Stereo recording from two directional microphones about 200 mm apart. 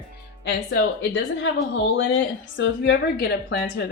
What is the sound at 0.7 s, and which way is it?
A woman's voice, 65° left (ahead or behind).